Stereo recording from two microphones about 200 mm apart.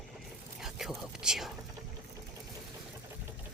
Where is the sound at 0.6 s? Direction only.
Centre (ahead or behind).